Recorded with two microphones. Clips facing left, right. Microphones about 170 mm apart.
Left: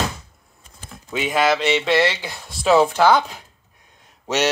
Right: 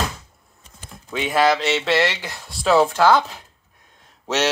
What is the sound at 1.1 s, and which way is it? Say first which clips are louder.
Speech: right 1 dB; centre (ahead or behind).